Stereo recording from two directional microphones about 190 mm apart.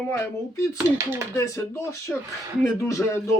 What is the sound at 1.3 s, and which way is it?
Speech, 15° left (ahead or behind).